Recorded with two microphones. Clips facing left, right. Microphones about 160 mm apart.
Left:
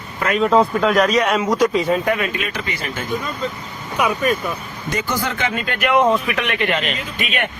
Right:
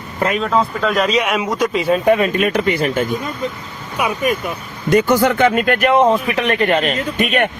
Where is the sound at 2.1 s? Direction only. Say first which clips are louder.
Right 7 dB; 30° right (ahead or behind).